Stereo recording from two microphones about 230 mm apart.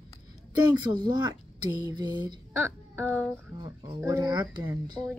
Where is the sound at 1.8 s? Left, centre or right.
Centre.